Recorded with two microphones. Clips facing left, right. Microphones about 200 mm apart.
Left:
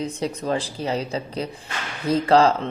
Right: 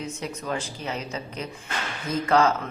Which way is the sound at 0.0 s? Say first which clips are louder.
Left 6 dB; 35° left (ahead or behind).